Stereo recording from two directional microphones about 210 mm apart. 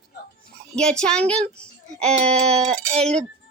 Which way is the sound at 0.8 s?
5° left (ahead or behind).